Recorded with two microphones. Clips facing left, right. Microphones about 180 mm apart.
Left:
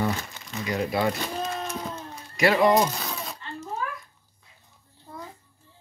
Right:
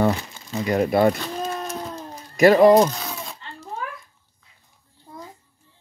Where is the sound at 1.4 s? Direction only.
35° right (ahead or behind).